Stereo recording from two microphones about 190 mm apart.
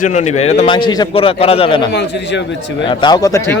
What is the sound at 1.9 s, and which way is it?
Speech, 65° left (ahead or behind).